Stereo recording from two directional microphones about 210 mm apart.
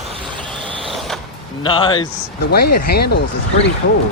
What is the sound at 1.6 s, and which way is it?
Speech, 25° left (ahead or behind).